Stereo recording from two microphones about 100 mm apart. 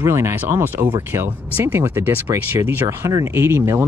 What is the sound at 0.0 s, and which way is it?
Speech, 25° right (ahead or behind).